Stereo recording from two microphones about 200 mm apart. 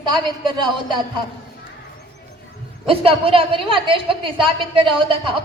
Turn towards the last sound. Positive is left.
turn(degrees=-25)  # may be behind; listen again after turning